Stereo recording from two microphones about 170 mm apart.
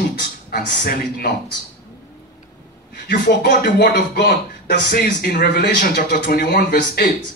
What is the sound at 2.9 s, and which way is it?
Speech, 65° left (ahead or behind).